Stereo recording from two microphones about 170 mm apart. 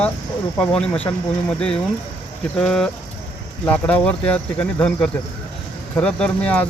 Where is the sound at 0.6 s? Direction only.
5° left (ahead or behind).